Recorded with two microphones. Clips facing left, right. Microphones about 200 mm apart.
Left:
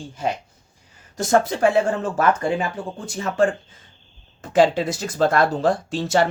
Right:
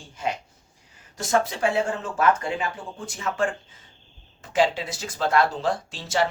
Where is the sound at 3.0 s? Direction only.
35° left (ahead or behind).